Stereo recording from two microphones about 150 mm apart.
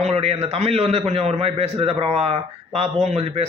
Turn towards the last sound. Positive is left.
turn(degrees=-45)  # may be behind; listen again after turning